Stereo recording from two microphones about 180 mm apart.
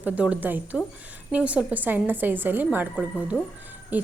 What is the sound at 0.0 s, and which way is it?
A woman's voice, 10° right (ahead or behind).